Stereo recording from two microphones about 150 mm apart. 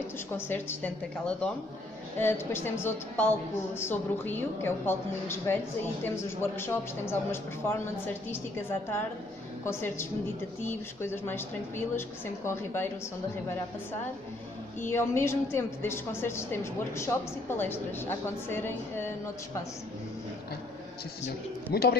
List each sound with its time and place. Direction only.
0.3 s a woman's voice: 15° left (ahead or behind)
14.8 s a woman's voice: 15° left (ahead or behind)
21.7 s speech: 90° left